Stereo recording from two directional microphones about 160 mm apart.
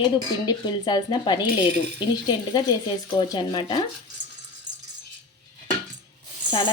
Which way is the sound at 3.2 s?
30° left (ahead or behind).